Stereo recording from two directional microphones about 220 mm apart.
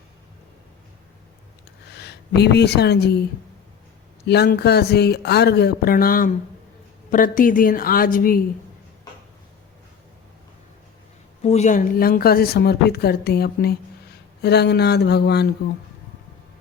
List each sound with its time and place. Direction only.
2.0 s speech: 50° left (ahead or behind)
4.3 s a woman's voice: 45° left (ahead or behind)
11.4 s speech: 30° left (ahead or behind); by 15.4 s 50° left (ahead or behind)